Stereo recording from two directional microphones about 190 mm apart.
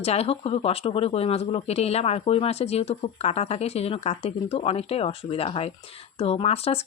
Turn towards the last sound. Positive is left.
turn(degrees=30)  # may be behind; listen again after turning